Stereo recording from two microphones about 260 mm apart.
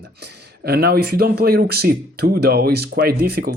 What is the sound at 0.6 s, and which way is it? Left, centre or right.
Speech, right.